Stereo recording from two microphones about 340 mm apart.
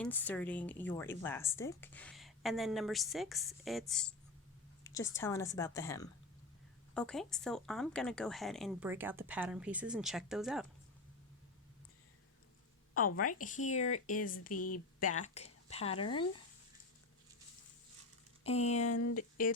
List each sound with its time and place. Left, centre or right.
0.0 s a woman's voice: centre
13.4 s speech: left
14.5 s speech: left
15.1 s a woman's voice: centre
18.4 s speech: centre
18.8 s speech: left